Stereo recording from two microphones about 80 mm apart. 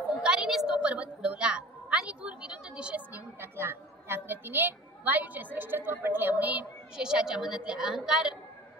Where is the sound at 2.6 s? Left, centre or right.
Centre.